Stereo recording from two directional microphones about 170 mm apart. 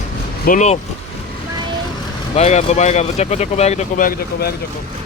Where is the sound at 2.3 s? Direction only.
40° left (ahead or behind); by 4.5 s 60° left (ahead or behind).